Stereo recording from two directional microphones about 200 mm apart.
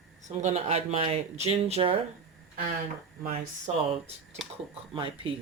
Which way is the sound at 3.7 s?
30° right (ahead or behind).